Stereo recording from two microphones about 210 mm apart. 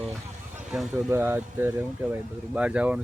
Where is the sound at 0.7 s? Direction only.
5° right (ahead or behind).